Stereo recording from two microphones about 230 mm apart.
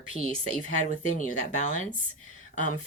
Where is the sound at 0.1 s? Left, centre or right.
Left.